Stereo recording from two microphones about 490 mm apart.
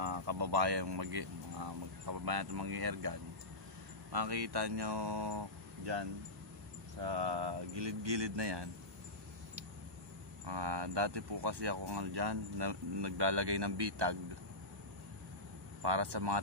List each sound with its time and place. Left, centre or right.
0.0 s speech: right
10.4 s speech: right
15.8 s speech: right